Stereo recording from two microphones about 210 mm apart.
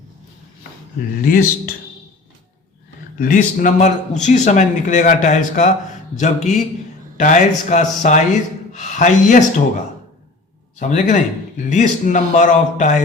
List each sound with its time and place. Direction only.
1.2 s speech: 45° left (ahead or behind)
3.2 s a man's voice: 40° left (ahead or behind)
10.8 s a man's voice: 35° left (ahead or behind)